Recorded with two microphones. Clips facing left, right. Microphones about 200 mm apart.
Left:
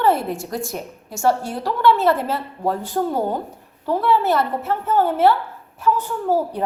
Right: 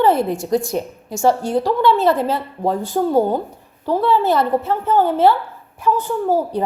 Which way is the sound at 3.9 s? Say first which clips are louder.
Right 2 dB; 15° right (ahead or behind).